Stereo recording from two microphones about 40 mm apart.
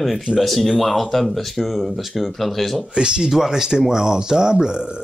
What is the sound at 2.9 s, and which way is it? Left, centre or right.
Speech, right.